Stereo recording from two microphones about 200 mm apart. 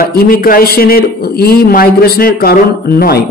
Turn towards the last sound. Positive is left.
turn(degrees=50)  # may be behind; listen again after turning